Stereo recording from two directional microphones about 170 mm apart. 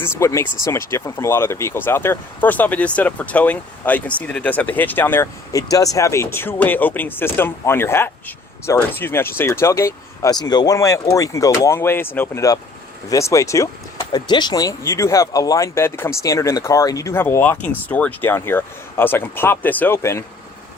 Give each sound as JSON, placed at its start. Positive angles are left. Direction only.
{"t": 0.0, "sound": "speech", "side_deg": 15}